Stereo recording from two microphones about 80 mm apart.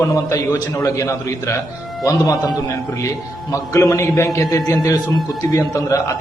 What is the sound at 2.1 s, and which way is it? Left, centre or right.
Speech, left.